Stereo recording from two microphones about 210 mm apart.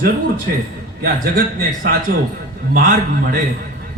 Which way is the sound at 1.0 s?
45° right (ahead or behind).